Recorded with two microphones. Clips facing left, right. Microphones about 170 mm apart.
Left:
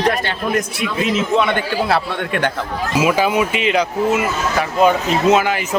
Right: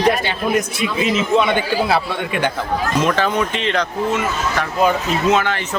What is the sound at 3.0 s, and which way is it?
Speech, 10° left (ahead or behind).